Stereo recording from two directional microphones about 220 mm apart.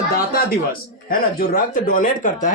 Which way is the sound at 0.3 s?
40° left (ahead or behind).